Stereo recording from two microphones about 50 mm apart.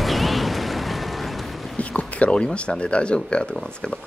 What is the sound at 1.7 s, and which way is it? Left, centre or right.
Speech, left.